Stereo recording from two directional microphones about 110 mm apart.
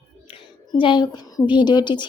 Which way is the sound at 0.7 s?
45° left (ahead or behind).